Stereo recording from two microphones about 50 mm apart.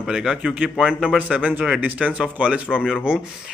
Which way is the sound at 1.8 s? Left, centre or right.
Right.